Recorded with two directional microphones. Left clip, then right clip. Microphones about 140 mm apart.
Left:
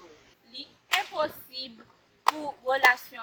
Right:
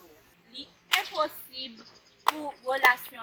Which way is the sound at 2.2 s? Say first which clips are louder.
Left 2 dB; centre (ahead or behind).